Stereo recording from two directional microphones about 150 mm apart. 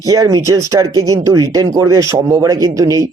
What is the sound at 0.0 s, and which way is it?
Speech, 25° right (ahead or behind).